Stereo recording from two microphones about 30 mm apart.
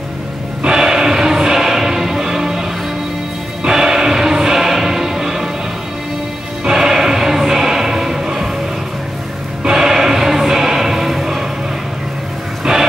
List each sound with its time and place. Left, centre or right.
0.7 s music: centre
3.6 s music: centre
6.6 s music: right
9.7 s choir: centre
12.7 s music: right